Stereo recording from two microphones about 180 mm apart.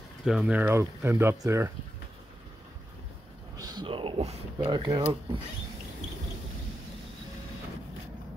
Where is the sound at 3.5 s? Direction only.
20° right (ahead or behind).